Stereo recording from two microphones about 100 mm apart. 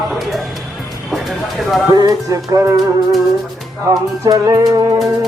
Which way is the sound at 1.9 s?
35° right (ahead or behind).